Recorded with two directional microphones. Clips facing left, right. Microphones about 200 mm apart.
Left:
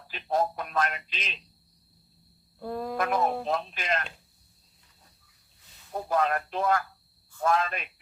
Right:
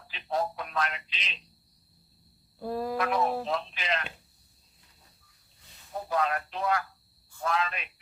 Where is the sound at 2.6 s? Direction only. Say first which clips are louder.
Right 1 dB; 5° right (ahead or behind).